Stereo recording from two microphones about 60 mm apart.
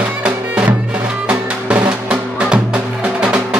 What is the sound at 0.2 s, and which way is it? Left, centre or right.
Music, right.